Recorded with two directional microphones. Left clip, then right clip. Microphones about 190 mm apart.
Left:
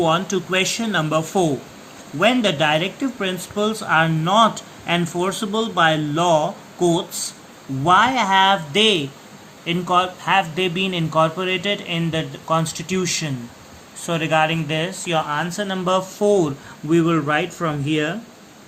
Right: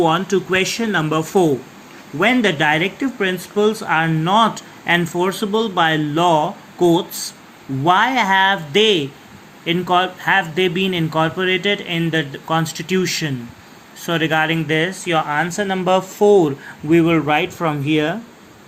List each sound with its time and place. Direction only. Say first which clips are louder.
0.0 s speech: right 3 dB; 15° right (ahead or behind)